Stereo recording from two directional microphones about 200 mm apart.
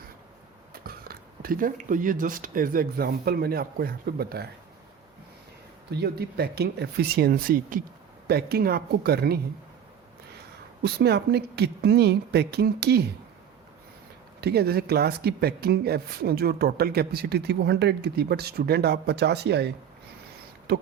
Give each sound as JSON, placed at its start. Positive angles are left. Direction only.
{"t": 0.7, "sound": "speech", "side_deg": -50}
{"t": 5.9, "sound": "speech", "side_deg": -55}
{"t": 10.8, "sound": "speech", "side_deg": -55}
{"t": 14.4, "sound": "speech", "side_deg": -50}
{"t": 20.7, "sound": "beatboxing", "side_deg": -55}